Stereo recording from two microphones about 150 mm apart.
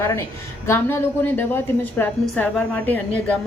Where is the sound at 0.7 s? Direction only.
15° left (ahead or behind).